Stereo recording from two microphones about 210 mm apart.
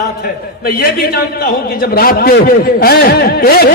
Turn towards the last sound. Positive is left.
turn(degrees=45)  # may be behind; listen again after turning